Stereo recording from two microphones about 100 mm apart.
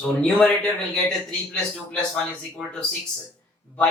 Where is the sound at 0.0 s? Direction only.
10° left (ahead or behind).